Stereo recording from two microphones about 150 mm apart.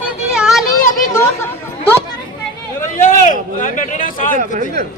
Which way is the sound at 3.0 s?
60° left (ahead or behind).